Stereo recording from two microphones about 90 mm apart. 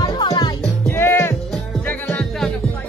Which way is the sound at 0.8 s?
25° left (ahead or behind).